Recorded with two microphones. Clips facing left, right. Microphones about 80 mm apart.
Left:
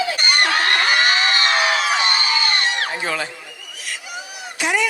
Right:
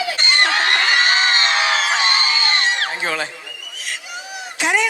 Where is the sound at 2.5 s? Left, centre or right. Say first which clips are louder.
Right 2 dB; right.